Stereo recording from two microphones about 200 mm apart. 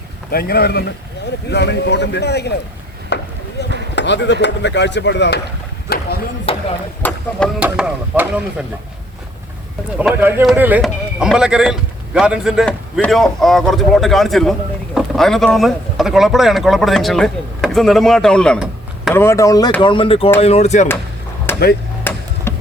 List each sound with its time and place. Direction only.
0.3 s a man's voice: 50° left (ahead or behind)
3.1 s chop: 60° left (ahead or behind)
3.6 s a sound: 55° left (ahead or behind)
3.9 s speech: 60° left (ahead or behind)
6.5 s chop: 30° left (ahead or behind)
7.0 s speech: 5° left (ahead or behind)
7.6 s speech: 5° right (ahead or behind)
10.0 s speech: 10° right (ahead or behind)
19.1 s speech: 15° left (ahead or behind); by 20.8 s 35° left (ahead or behind)
21.5 s chop: 10° left (ahead or behind)
22.1 s a sound: 10° left (ahead or behind)
22.5 s music: 10° left (ahead or behind)